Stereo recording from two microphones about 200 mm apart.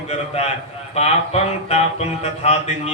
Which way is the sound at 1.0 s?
30° left (ahead or behind).